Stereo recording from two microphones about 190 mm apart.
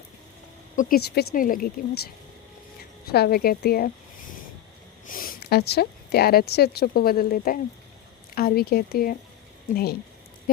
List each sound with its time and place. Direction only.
0.8 s speech: 50° left (ahead or behind)
3.1 s speech: 55° left (ahead or behind)
5.0 s speech: 50° left (ahead or behind)